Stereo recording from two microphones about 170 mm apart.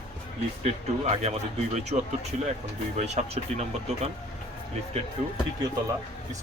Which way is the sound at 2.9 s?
40° right (ahead or behind).